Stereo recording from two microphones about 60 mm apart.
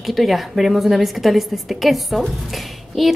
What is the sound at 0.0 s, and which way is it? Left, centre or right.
A woman's voice, centre.